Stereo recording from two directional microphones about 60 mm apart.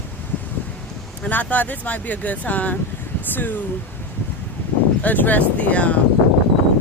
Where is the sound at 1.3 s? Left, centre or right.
Left.